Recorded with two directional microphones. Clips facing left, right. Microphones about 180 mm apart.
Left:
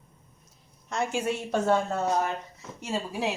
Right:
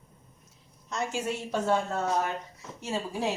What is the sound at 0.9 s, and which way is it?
Speech, 55° left (ahead or behind).